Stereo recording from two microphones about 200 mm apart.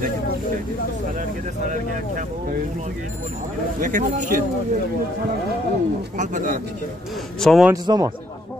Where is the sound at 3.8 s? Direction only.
40° right (ahead or behind).